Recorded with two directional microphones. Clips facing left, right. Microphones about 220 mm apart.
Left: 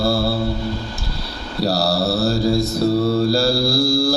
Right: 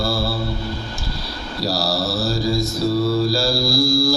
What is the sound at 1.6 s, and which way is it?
Mantra, 60° left (ahead or behind).